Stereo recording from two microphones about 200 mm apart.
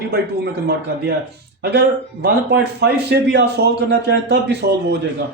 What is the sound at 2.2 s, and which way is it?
A man's voice, 55° right (ahead or behind).